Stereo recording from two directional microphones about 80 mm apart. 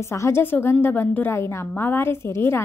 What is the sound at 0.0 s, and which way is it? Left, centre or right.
A woman's voice, left.